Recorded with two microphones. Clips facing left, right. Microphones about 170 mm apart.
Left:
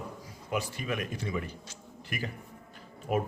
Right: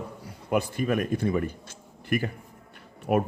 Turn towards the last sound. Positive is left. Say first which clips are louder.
# right 6 dB
turn(degrees=-60)  # may be behind; listen again after turning